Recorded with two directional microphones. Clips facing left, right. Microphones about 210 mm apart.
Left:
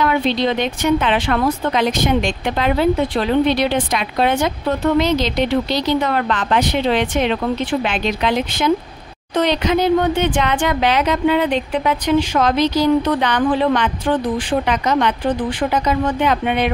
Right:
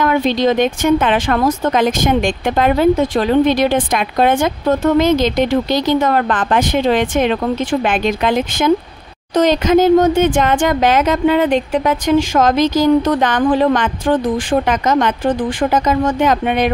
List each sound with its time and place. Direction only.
0.0 s speech: 45° right (ahead or behind)